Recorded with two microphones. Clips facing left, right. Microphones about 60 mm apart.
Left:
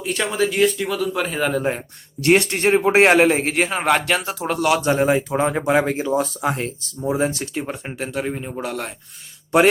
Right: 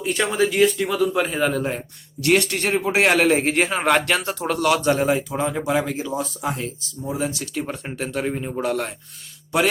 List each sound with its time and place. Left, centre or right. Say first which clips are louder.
0.0 s speech: right 1 dB; centre
2.2 s speech: left 3 dB; left
3.1 s speech: even; centre
3.3 s speech: right 1 dB; centre
4.8 s speech: left 2 dB; left
5.3 s speech: left 4 dB; left
7.6 s speech: even; centre